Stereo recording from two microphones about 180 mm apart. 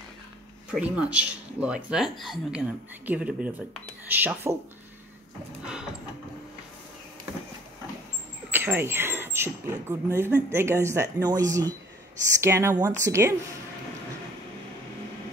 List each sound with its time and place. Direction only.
0.7 s speech: 5° right (ahead or behind)
8.5 s speech: 10° right (ahead or behind)